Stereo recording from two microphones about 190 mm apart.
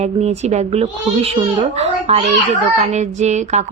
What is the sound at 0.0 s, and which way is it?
A woman's voice, 35° right (ahead or behind).